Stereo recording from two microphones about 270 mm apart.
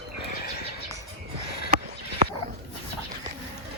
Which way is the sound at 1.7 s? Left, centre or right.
Right.